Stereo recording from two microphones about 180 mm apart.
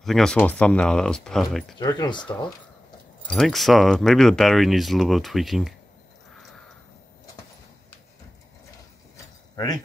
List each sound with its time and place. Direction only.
0.0 s speech: centre (ahead or behind)
1.8 s speech: 20° left (ahead or behind)
3.3 s speech: centre (ahead or behind)
9.1 s keys jangling: 20° left (ahead or behind)